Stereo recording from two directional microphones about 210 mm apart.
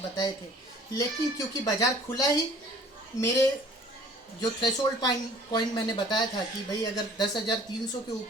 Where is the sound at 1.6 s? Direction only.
15° left (ahead or behind).